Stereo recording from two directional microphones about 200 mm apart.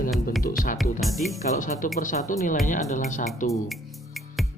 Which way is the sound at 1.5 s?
40° left (ahead or behind).